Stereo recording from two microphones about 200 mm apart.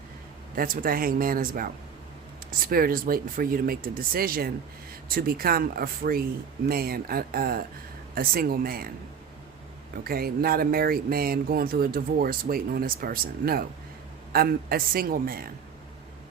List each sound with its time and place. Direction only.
0.5 s speech: 45° right (ahead or behind)
10.0 s speech: 50° right (ahead or behind)